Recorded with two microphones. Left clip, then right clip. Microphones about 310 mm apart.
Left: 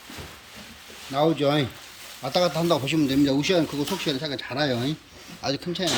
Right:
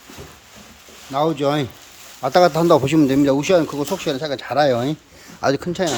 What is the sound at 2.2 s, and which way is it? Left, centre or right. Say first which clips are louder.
Speech: right 9 dB; centre.